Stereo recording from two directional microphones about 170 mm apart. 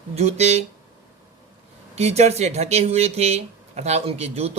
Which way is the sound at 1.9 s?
40° right (ahead or behind).